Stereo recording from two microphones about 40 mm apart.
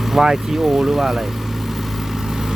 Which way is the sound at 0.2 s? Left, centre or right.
Centre.